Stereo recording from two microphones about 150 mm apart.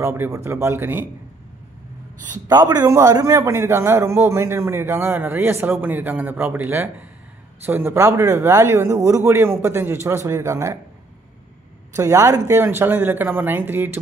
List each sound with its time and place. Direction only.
0.0 s a man's voice: 20° right (ahead or behind)
2.4 s a man's voice: 25° right (ahead or behind)
11.9 s a man's voice: 20° right (ahead or behind)